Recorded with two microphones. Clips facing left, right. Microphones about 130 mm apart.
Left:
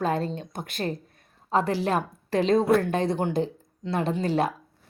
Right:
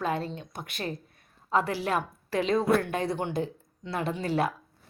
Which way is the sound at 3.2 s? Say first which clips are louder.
Left 4 dB; 40° left (ahead or behind).